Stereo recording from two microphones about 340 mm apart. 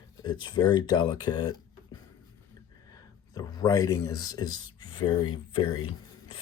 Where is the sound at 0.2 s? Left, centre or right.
Centre.